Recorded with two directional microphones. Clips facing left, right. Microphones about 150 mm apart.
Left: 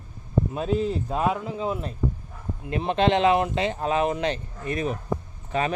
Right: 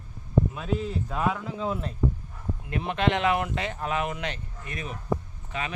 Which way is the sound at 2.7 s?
25° left (ahead or behind).